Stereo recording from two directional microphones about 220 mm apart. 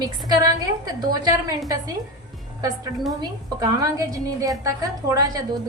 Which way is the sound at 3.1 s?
15° right (ahead or behind).